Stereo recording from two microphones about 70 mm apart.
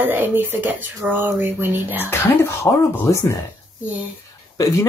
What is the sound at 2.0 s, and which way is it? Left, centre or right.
Speech, left.